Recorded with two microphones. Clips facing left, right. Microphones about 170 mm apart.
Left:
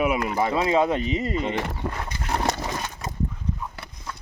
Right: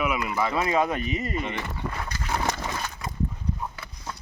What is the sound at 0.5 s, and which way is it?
Speech, 25° left (ahead or behind).